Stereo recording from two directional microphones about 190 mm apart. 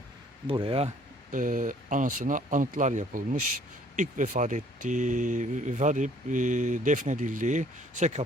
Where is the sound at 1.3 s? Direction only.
45° right (ahead or behind).